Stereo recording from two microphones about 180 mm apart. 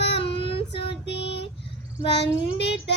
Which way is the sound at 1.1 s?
70° left (ahead or behind).